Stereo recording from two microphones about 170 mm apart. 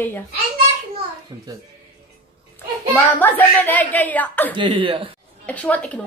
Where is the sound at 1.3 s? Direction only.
20° right (ahead or behind).